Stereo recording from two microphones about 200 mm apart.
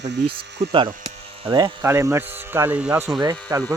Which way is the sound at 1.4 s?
20° right (ahead or behind).